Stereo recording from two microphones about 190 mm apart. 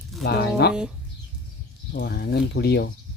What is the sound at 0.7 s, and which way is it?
Speech, 5° right (ahead or behind).